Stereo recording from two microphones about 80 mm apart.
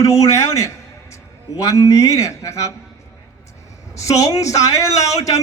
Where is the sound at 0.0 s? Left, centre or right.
Left.